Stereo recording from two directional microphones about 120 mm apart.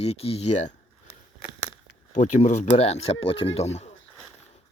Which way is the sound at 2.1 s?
75° left (ahead or behind).